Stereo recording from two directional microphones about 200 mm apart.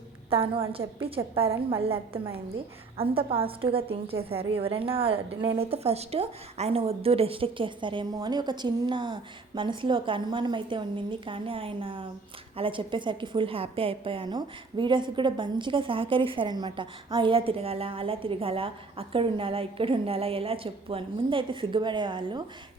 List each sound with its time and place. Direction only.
0.3 s a woman's voice: 30° right (ahead or behind)